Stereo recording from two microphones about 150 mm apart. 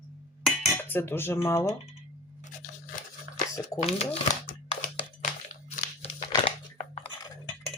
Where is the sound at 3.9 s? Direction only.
45° left (ahead or behind).